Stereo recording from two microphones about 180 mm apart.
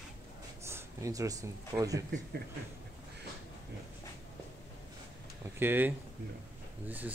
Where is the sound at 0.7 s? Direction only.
15° right (ahead or behind).